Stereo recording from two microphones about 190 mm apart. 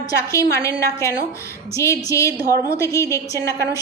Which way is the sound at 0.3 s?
15° left (ahead or behind).